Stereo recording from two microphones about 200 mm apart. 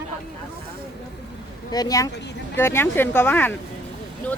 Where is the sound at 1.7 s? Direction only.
20° left (ahead or behind).